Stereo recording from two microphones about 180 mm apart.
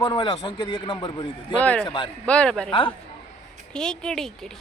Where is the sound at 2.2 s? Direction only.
5° left (ahead or behind).